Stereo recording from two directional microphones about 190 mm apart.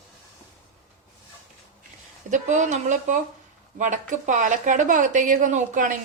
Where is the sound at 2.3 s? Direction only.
40° right (ahead or behind).